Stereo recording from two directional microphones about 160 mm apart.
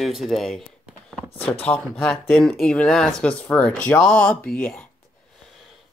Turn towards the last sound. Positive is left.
turn(degrees=0)  # may be behind; listen again after turning